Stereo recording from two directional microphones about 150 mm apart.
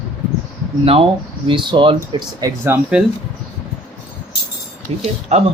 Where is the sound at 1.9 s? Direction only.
20° right (ahead or behind).